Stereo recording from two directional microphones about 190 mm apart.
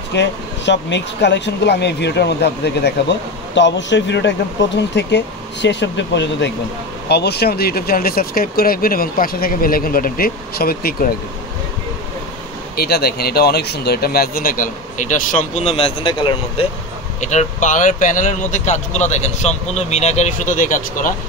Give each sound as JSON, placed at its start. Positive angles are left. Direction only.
{"t": 0.1, "sound": "speech", "side_deg": 70}
{"t": 12.7, "sound": "speech", "side_deg": 55}
{"t": 17.2, "sound": "speech", "side_deg": 35}